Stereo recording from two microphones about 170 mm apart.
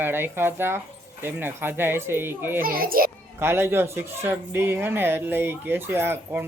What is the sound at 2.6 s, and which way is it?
Speech, 60° right (ahead or behind).